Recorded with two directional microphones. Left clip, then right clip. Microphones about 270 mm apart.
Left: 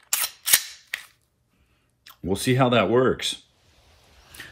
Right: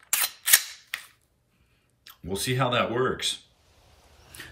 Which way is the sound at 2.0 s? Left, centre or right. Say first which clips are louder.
Left 4 dB; left.